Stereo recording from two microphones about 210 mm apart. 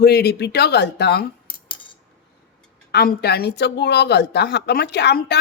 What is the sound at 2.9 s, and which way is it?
Speech, 50° left (ahead or behind).